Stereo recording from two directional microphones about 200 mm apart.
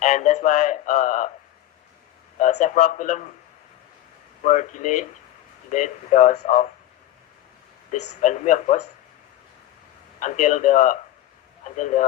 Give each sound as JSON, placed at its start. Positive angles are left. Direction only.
{"t": 0.0, "sound": "a sound", "side_deg": 40}
{"t": 2.4, "sound": "a man's voice", "side_deg": 35}
{"t": 4.4, "sound": "speech", "side_deg": 40}
{"t": 7.9, "sound": "speech", "side_deg": 35}
{"t": 10.2, "sound": "speech", "side_deg": 40}